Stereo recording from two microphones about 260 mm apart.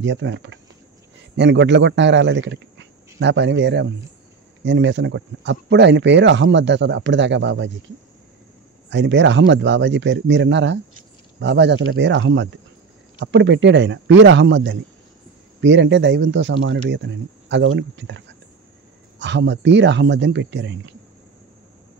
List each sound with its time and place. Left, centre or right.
0.0 s speech: right
8.9 s speech: right